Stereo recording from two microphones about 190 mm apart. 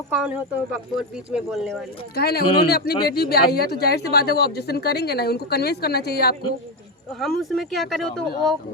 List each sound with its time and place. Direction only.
0.1 s speech: 5° right (ahead or behind)
2.1 s speech: 55° left (ahead or behind)
7.1 s speech: centre (ahead or behind)